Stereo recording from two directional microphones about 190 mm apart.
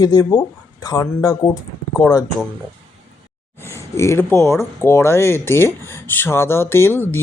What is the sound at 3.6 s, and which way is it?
Speech, 15° left (ahead or behind).